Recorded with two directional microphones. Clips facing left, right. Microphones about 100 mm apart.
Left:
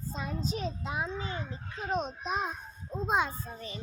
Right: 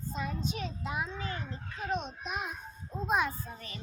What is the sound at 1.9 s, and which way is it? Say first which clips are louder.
A child's voice: left 3 dB; 40° left (ahead or behind).